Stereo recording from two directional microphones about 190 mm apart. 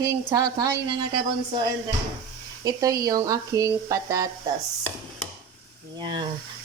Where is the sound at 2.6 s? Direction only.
20° right (ahead or behind).